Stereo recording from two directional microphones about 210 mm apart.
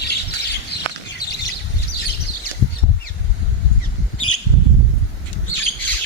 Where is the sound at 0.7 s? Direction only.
50° left (ahead or behind).